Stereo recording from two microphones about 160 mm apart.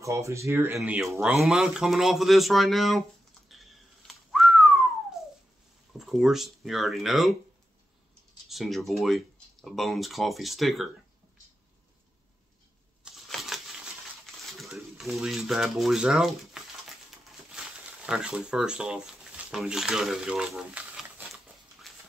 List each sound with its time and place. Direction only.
0.0 s speech: 20° right (ahead or behind)
0.7 s speech: 5° right (ahead or behind)
4.1 s whistling: centre (ahead or behind)
5.9 s speech: centre (ahead or behind)
8.5 s speech: centre (ahead or behind)
13.0 s a sound: centre (ahead or behind)
14.4 s speech: centre (ahead or behind)
17.5 s a sound: 5° right (ahead or behind)